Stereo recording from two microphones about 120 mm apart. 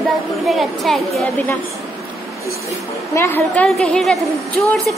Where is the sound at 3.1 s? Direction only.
20° left (ahead or behind).